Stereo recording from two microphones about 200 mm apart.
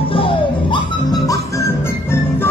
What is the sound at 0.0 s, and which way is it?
Music, 25° left (ahead or behind).